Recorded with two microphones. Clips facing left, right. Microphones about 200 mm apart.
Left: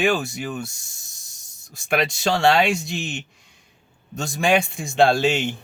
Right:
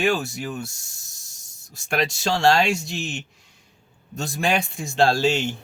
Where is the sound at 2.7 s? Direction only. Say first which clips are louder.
Left 1 dB; centre (ahead or behind).